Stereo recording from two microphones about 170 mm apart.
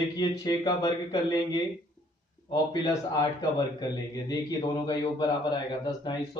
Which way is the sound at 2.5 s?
25° left (ahead or behind).